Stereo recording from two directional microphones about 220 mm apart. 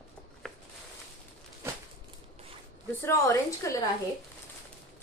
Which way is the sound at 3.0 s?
15° left (ahead or behind).